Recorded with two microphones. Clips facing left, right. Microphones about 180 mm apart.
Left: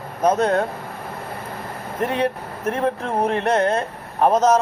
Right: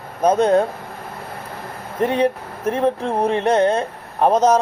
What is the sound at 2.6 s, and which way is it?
Speech, 30° right (ahead or behind).